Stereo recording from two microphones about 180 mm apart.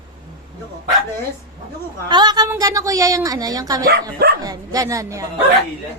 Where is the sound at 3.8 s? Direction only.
60° right (ahead or behind).